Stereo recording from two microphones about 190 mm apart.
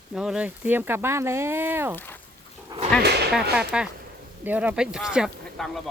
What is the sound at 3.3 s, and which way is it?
Speech, 5° right (ahead or behind).